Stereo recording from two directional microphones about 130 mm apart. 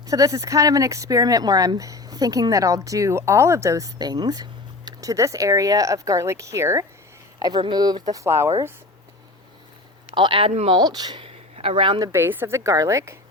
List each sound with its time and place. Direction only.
0.1 s speech: 25° right (ahead or behind)
8.1 s speech: 20° right (ahead or behind)
10.2 s speech: 40° right (ahead or behind)
11.3 s a sound: 50° right (ahead or behind)
12.1 s speech: 15° right (ahead or behind)